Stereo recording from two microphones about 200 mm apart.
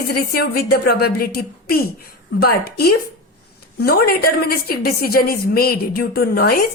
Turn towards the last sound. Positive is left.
turn(degrees=50)  # may be behind; listen again after turning